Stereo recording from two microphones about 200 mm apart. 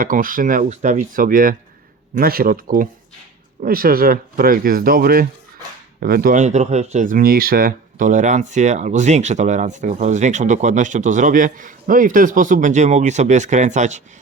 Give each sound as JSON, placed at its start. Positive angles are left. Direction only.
{"t": 0.0, "sound": "speech", "side_deg": -45}